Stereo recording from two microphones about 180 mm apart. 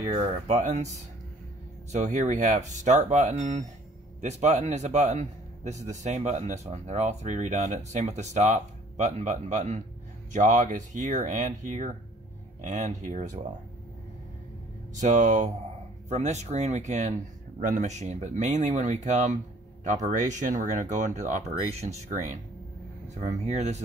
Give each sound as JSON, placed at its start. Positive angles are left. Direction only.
{"t": 0.1, "sound": "speech", "side_deg": -40}
{"t": 1.9, "sound": "speech", "side_deg": -40}
{"t": 15.0, "sound": "speech", "side_deg": -40}